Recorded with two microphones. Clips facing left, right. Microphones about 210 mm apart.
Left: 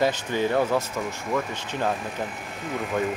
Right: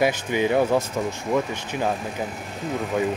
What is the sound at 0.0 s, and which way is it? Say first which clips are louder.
Speech: right 2 dB; 15° right (ahead or behind).